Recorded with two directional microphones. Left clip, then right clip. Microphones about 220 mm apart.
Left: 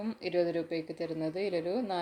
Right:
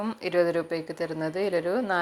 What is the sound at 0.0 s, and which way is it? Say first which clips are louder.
Speech: right 6 dB; 5° right (ahead or behind).